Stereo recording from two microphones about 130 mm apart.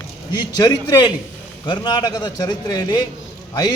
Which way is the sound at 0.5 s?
30° left (ahead or behind).